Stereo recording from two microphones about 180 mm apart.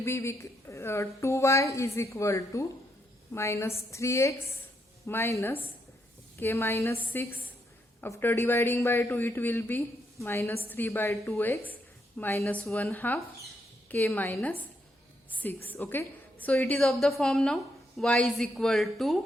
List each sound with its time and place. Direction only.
0.0 s a woman's voice: 15° left (ahead or behind)